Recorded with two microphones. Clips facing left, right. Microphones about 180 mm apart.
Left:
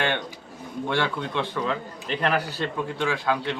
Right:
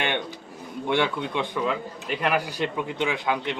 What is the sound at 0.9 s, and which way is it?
A man's voice, 15° right (ahead or behind).